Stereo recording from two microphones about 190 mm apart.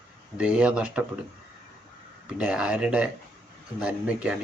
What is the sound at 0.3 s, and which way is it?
Speech, 5° right (ahead or behind).